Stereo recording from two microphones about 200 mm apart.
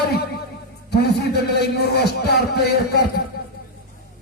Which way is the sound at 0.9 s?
55° left (ahead or behind).